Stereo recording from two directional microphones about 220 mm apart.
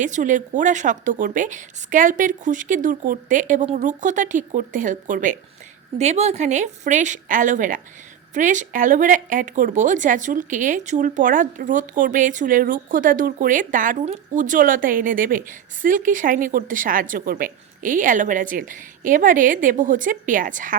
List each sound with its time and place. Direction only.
0.0 s speech: 35° right (ahead or behind)